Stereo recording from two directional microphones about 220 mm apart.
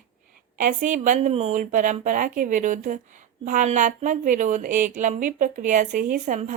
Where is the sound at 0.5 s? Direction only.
35° right (ahead or behind).